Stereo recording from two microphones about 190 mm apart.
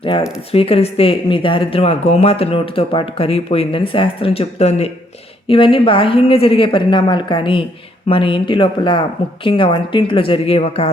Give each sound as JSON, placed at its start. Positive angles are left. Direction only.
{"t": 0.0, "sound": "speech", "side_deg": 25}